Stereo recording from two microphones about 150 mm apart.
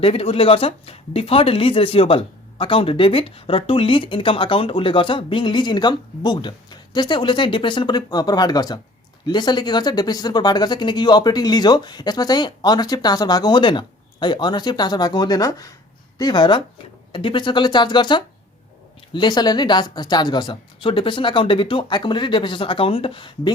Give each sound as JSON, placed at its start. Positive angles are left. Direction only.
{"t": 0.0, "sound": "speech", "side_deg": 40}